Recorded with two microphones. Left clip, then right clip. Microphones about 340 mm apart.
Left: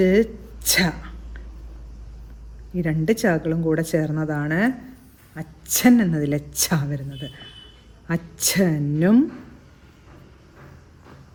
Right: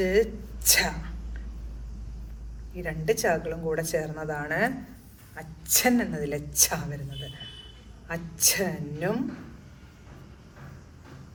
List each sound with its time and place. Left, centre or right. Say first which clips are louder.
0.0 s speech: left 5 dB; left
2.8 s a woman's voice: left 4 dB; left
8.0 s a woman's voice: left 2 dB; left